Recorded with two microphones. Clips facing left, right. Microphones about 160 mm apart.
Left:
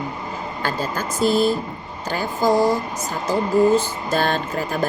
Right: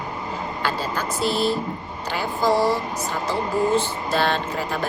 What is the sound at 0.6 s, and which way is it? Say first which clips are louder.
A woman's voice: left 2 dB; 45° left (ahead or behind).